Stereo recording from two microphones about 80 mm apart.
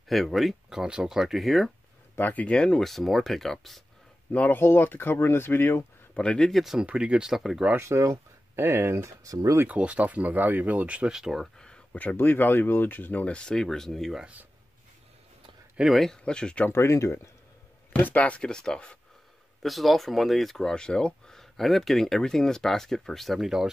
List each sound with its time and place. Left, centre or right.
0.1 s speech: centre
2.1 s speech: left
2.5 s speech: centre
4.3 s speech: left
6.1 s speech: centre
6.6 s speech: centre
7.7 s speech: right
9.7 s speech: centre
11.5 s speech: centre
15.8 s speech: centre
16.6 s speech: left
17.9 s speech: left
19.6 s speech: centre